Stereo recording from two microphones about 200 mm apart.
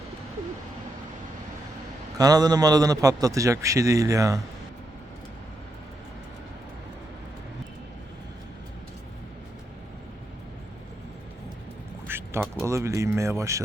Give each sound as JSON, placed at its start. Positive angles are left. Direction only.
{"t": 2.1, "sound": "a man's voice", "side_deg": -20}
{"t": 12.0, "sound": "a sound", "side_deg": -10}
{"t": 12.6, "sound": "a man's voice", "side_deg": -15}